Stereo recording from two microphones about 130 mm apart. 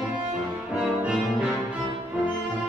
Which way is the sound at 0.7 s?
10° right (ahead or behind).